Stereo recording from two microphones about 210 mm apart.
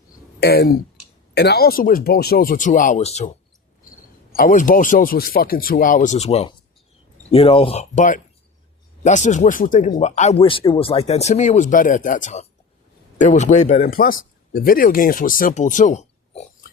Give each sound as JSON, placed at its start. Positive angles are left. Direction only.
{"t": 0.3, "sound": "speech", "side_deg": 50}
{"t": 4.4, "sound": "speech", "side_deg": 40}